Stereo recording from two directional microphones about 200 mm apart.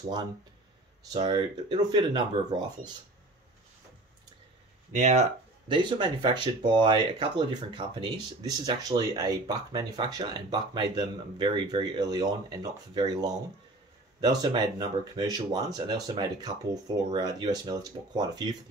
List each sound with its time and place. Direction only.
1.1 s speech: 20° right (ahead or behind)
4.9 s speech: 35° right (ahead or behind)